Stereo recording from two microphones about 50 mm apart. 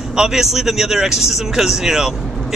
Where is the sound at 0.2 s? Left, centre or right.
Centre.